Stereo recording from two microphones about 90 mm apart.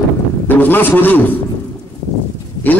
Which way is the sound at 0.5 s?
20° left (ahead or behind).